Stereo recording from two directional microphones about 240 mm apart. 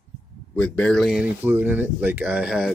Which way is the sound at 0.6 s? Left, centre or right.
Centre.